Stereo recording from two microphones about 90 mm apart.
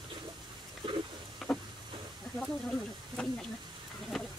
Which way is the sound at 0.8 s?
70° right (ahead or behind).